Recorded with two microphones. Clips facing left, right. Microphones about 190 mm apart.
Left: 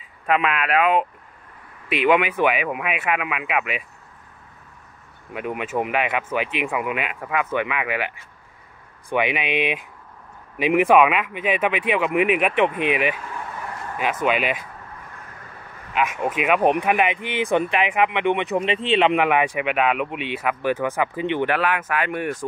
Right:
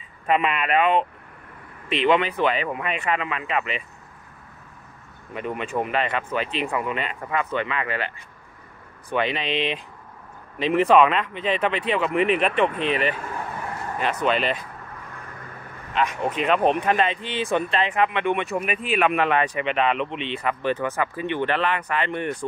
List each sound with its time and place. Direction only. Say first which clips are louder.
0.3 s speech: left 1 dB; centre (ahead or behind)
5.3 s speech: left 1 dB; 10° left (ahead or behind)
14.2 s speech: left 1 dB; 10° left (ahead or behind)
15.9 s speech: left 1 dB; 5° left (ahead or behind)